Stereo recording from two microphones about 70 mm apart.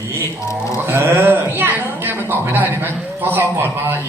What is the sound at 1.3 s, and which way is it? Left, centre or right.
A woman's voice, right.